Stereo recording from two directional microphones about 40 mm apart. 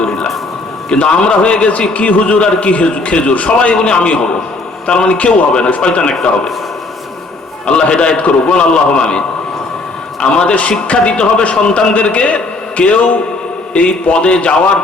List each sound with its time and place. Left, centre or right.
1.0 s a man's voice: left
3.8 s a man's voice: left
7.7 s a man's voice: left